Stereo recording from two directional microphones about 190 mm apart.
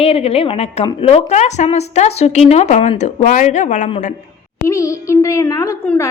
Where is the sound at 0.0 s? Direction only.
30° left (ahead or behind).